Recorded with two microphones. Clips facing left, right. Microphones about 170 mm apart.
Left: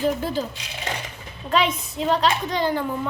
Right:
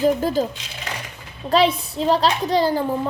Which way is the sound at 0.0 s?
40° right (ahead or behind).